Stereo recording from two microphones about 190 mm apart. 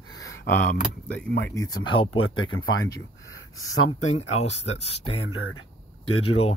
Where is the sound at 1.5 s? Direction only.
20° left (ahead or behind).